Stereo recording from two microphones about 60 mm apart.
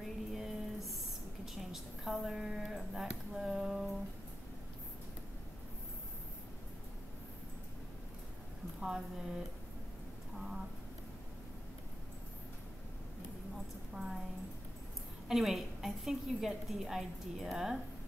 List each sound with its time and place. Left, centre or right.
0.0 s a sound: centre
8.8 s speech: centre
13.9 s a woman's voice: centre
15.2 s a woman's voice: centre